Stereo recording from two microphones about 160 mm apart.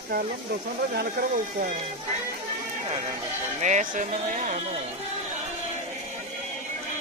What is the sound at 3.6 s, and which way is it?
Speech, 50° right (ahead or behind).